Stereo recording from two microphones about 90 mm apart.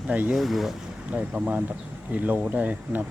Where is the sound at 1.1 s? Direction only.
15° right (ahead or behind).